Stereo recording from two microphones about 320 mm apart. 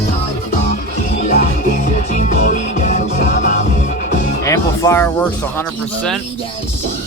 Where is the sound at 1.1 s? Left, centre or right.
Left.